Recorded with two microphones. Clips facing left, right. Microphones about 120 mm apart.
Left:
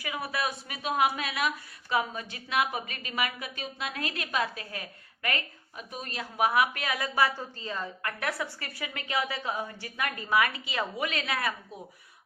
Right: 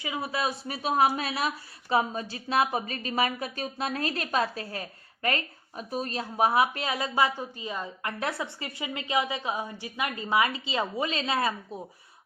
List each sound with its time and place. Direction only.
0.0 s a woman's voice: 25° right (ahead or behind)
7.1 s a woman's voice: 20° right (ahead or behind)